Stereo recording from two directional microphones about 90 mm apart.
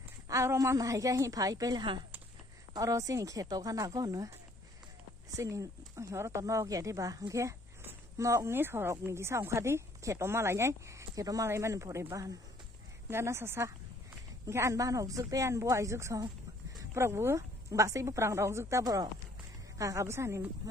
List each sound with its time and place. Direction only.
0.3 s speech: 35° right (ahead or behind)
5.4 s speech: 35° right (ahead or behind)